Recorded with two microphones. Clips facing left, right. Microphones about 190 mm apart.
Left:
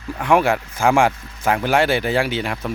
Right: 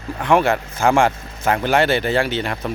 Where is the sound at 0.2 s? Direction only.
10° left (ahead or behind).